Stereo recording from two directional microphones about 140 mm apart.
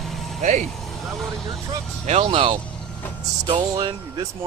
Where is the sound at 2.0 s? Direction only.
50° right (ahead or behind).